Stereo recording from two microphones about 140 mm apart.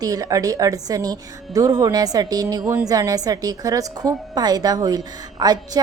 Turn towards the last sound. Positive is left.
turn(degrees=-30)  # may be behind; listen again after turning